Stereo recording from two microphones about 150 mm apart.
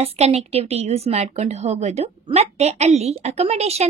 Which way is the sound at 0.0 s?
45° right (ahead or behind).